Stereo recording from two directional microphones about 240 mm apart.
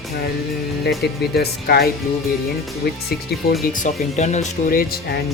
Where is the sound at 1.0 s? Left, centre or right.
Left.